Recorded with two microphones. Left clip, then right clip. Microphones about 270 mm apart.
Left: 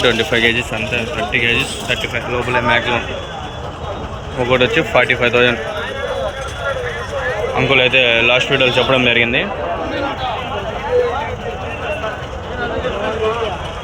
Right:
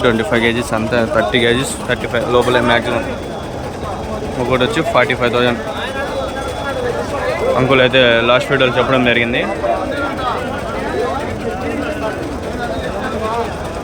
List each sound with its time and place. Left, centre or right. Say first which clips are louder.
0.0 s speech: even; centre
1.3 s a man's voice: right 2 dB; left
1.9 s speech: right 8 dB; centre
4.4 s speech: left 2 dB; centre
7.6 s speech: even; centre